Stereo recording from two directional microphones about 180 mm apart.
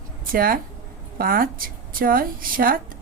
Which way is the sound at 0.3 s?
55° right (ahead or behind).